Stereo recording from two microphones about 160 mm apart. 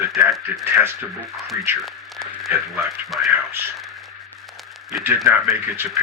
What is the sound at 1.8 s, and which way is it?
Radio, centre (ahead or behind).